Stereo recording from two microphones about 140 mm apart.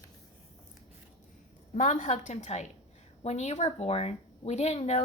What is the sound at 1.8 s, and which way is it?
Speech, 60° left (ahead or behind).